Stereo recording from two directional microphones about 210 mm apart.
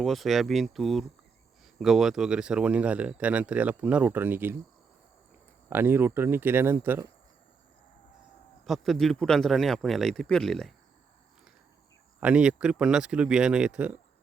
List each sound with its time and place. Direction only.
0.0 s speech: centre (ahead or behind)
5.6 s speech: 10° right (ahead or behind)
8.6 s speech: centre (ahead or behind)
12.2 s speech: 5° right (ahead or behind)